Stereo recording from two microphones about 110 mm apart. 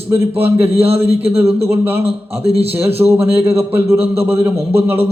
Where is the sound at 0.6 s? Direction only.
65° right (ahead or behind).